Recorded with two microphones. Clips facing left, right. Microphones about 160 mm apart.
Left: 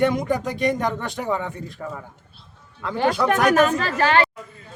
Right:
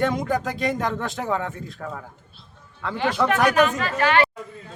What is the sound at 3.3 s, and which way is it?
Speech, 45° left (ahead or behind).